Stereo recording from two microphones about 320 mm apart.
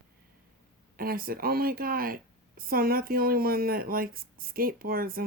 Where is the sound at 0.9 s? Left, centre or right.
Right.